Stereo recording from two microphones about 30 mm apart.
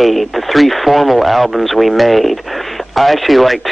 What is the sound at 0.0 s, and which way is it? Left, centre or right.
Speech, centre.